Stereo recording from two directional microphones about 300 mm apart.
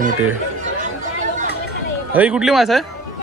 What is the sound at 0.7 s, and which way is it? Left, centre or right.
Chatter, right.